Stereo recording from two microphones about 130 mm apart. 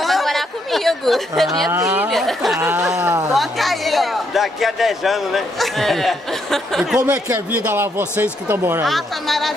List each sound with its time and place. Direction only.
0.0 s a sound: centre (ahead or behind)
1.7 s speech: 15° right (ahead or behind)
2.0 s speech: centre (ahead or behind)
3.0 s speech: 25° right (ahead or behind)
3.3 s a man's voice: centre (ahead or behind)
7.2 s speech: 15° right (ahead or behind)
8.8 s speech: centre (ahead or behind)